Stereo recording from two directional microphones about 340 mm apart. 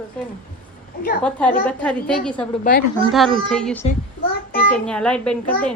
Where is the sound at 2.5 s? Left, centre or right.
Left.